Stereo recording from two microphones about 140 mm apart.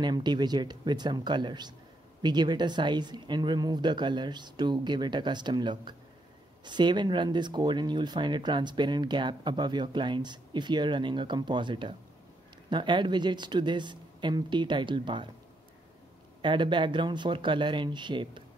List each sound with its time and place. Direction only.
0.0 s speech: 30° right (ahead or behind)
16.3 s speech: 35° right (ahead or behind)